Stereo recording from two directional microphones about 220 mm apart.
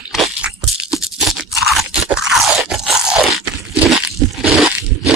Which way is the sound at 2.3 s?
Centre (ahead or behind).